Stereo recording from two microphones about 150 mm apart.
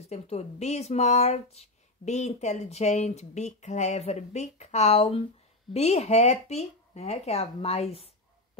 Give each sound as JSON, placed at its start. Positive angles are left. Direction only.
{"t": 0.0, "sound": "speech", "side_deg": 45}